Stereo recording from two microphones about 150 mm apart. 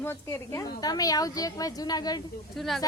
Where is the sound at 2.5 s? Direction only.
Centre (ahead or behind).